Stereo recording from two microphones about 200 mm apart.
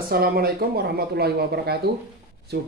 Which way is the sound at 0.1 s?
50° right (ahead or behind).